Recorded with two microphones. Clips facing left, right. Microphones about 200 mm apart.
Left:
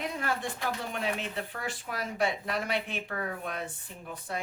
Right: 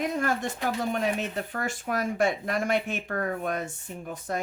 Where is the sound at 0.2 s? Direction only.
45° right (ahead or behind).